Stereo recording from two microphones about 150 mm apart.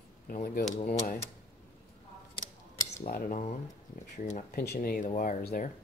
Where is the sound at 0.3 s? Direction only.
60° left (ahead or behind).